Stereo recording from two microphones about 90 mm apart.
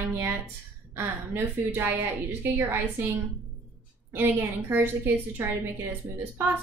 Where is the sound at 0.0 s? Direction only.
30° right (ahead or behind).